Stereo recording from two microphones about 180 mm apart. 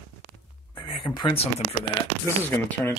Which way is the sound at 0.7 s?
25° left (ahead or behind).